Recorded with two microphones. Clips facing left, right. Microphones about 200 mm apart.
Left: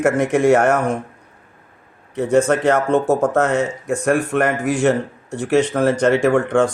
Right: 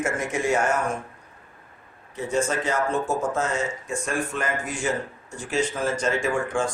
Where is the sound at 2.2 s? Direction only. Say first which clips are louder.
Left 9 dB; 65° left (ahead or behind).